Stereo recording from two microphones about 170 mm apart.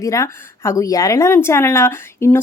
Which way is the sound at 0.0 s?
20° left (ahead or behind).